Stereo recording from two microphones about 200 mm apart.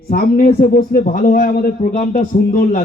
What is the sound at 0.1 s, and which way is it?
A man's voice, 45° left (ahead or behind).